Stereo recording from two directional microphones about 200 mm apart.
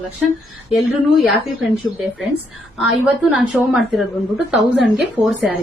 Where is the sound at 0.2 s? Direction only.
5° right (ahead or behind).